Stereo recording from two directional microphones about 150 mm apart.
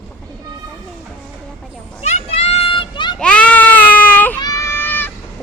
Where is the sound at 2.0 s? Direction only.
45° left (ahead or behind).